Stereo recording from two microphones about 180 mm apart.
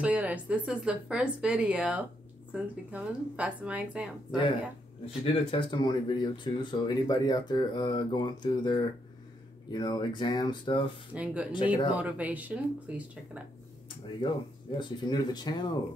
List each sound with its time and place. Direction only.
0.0 s speech: 10° right (ahead or behind)
5.0 s speech: 30° left (ahead or behind)
11.1 s speech: 5° right (ahead or behind)
11.5 s speech: 25° left (ahead or behind)
11.9 s speech: 10° right (ahead or behind)
14.2 s speech: 25° left (ahead or behind)